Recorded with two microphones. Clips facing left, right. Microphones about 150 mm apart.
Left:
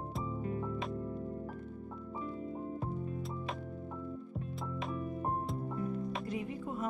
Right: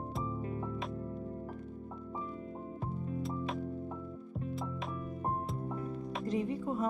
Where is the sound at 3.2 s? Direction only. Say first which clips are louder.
Right 4 dB; centre (ahead or behind).